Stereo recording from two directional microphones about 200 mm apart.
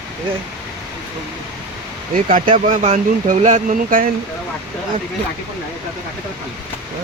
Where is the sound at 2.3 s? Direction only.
35° right (ahead or behind).